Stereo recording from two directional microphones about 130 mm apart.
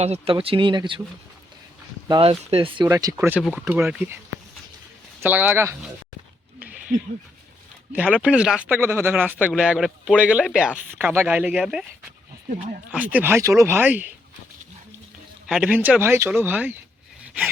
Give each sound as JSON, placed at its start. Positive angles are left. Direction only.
{"t": 0.0, "sound": "speech", "side_deg": -55}
{"t": 0.3, "sound": "speech", "side_deg": -40}
{"t": 2.0, "sound": "speech", "side_deg": -35}
{"t": 2.3, "sound": "speech", "side_deg": -50}
{"t": 2.8, "sound": "speech", "side_deg": -25}
{"t": 5.2, "sound": "speech", "side_deg": -15}
{"t": 7.9, "sound": "speech", "side_deg": -10}
{"t": 9.5, "sound": "speech", "side_deg": -5}
{"t": 12.9, "sound": "speech", "side_deg": -10}
{"t": 15.4, "sound": "speech", "side_deg": -5}